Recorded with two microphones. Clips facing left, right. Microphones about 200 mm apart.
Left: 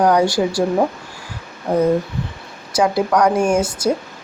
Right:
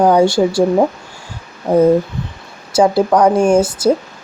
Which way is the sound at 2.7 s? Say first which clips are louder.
Right 4 dB; 30° right (ahead or behind).